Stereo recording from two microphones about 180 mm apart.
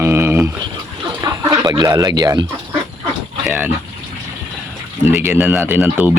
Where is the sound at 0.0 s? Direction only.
15° right (ahead or behind).